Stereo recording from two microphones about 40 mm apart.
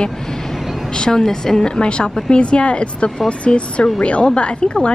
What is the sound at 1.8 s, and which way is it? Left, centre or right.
A woman's voice, left.